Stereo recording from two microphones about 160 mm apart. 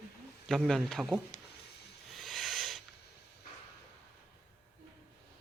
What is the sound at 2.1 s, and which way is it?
Hiss, centre (ahead or behind).